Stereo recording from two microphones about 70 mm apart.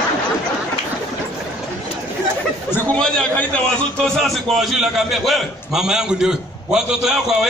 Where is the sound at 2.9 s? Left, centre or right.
Centre.